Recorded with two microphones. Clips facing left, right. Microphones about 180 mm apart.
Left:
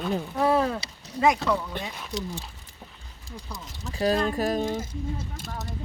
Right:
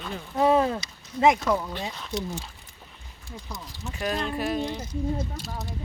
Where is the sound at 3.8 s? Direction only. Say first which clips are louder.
Left 5 dB; 35° left (ahead or behind).